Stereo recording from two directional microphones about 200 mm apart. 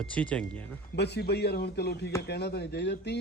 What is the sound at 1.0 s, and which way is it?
Speech, 55° left (ahead or behind).